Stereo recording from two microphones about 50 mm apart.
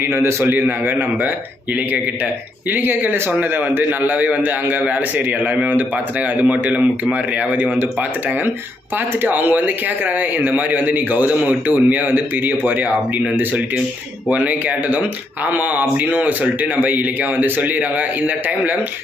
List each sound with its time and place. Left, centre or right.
0.0 s speech: right
2.7 s speech: right
9.2 s speech: right